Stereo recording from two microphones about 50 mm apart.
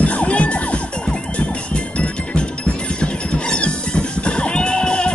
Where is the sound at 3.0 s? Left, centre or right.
Centre.